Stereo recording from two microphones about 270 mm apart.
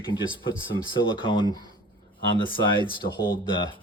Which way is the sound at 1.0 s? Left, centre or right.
Centre.